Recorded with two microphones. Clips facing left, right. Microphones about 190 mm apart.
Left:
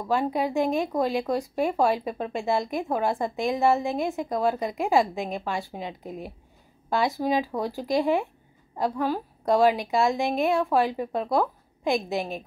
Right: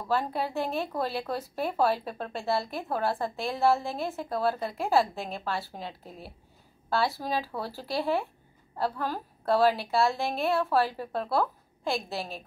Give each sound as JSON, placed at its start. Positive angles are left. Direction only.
{"t": 0.0, "sound": "a woman's voice", "side_deg": 15}